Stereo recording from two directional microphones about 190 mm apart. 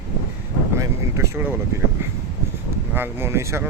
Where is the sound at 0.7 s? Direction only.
15° right (ahead or behind).